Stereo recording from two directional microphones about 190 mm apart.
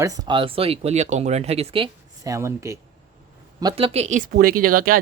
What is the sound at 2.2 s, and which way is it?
Speech, 15° right (ahead or behind).